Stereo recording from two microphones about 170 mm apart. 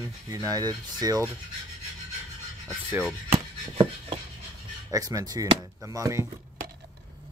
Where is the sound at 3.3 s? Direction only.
30° right (ahead or behind).